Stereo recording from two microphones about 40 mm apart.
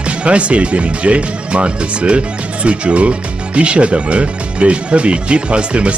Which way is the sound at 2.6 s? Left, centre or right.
Right.